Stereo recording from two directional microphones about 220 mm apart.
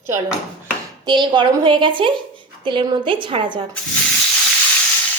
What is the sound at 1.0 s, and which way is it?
A woman's voice, 20° right (ahead or behind).